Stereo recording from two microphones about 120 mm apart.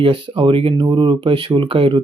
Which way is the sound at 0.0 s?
50° right (ahead or behind).